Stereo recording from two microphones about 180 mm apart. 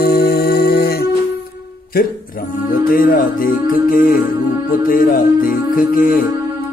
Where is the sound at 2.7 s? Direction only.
55° left (ahead or behind).